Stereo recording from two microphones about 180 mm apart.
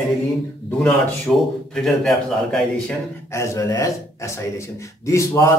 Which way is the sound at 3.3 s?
15° left (ahead or behind).